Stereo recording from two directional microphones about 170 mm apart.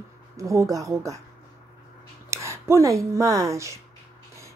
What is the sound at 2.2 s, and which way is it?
Speech, 15° right (ahead or behind).